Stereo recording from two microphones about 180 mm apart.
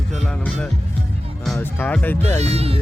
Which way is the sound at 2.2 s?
35° right (ahead or behind).